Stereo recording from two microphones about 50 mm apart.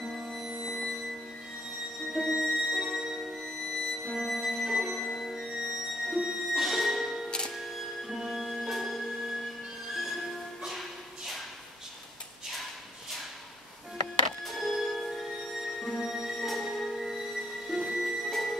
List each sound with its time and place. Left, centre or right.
2.1 s music: centre
3.4 s music: centre
7.2 s music: centre
7.5 s music: centre
14.4 s music: centre